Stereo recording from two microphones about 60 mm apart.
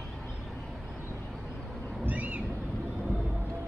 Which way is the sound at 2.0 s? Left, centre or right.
Right.